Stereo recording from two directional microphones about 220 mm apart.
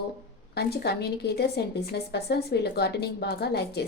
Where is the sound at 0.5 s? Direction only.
45° left (ahead or behind).